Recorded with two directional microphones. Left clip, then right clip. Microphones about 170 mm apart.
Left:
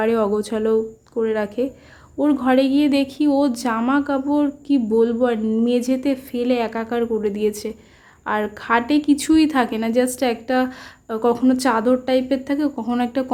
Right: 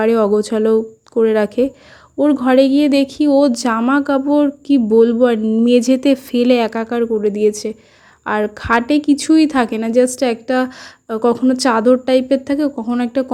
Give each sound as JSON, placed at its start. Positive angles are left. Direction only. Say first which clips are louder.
{"t": 0.0, "sound": "a woman's voice", "louder": "right 5 dB", "side_deg": -25}
{"t": 12.8, "sound": "speech", "louder": "right 3 dB", "side_deg": -15}